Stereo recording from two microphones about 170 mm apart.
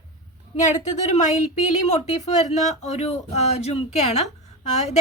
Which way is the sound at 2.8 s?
40° left (ahead or behind).